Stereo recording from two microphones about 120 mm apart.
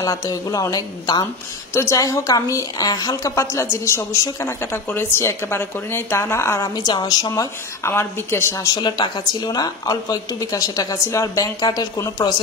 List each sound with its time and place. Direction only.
0.0 s a woman's voice: 30° left (ahead or behind)
6.9 s speech: 35° left (ahead or behind)
7.9 s a woman's voice: 20° left (ahead or behind)
8.7 s speech: 40° left (ahead or behind)